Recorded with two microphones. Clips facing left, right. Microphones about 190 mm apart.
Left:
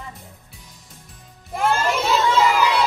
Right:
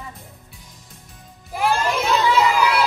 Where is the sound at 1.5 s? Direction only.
Centre (ahead or behind).